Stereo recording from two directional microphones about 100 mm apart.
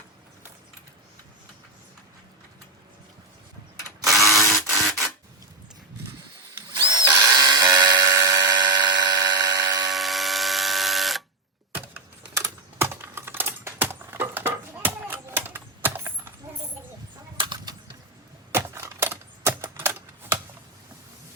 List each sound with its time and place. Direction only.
4.0 s a sound: centre (ahead or behind)
6.7 s drill: 50° right (ahead or behind)
9.9 s electric toothbrush: centre (ahead or behind)
12.8 s typing: 25° right (ahead or behind)
17.3 s typing: 55° right (ahead or behind)
18.5 s typewriter: 25° right (ahead or behind)